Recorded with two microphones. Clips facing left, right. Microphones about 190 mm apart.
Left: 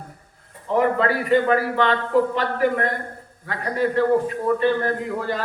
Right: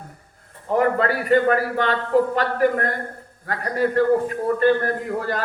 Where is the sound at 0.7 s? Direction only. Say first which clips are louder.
Even; 45° right (ahead or behind).